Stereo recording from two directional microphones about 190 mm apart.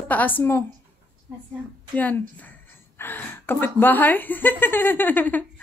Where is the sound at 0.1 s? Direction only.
10° left (ahead or behind).